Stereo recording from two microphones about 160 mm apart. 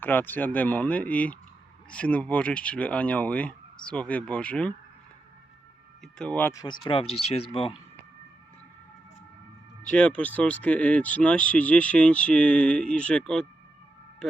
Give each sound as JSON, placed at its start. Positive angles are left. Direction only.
{"t": 0.0, "sound": "speech", "side_deg": 10}
{"t": 6.0, "sound": "speech", "side_deg": 5}
{"t": 6.5, "sound": "speech", "side_deg": 25}
{"t": 9.8, "sound": "speech", "side_deg": 5}